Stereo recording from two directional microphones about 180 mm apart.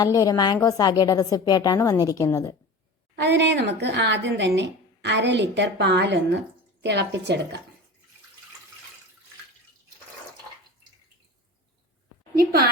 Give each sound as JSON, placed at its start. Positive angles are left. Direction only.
{"t": 0.0, "sound": "a woman's voice", "side_deg": 20}
{"t": 3.2, "sound": "speech", "side_deg": -75}
{"t": 12.4, "sound": "a woman's voice", "side_deg": -55}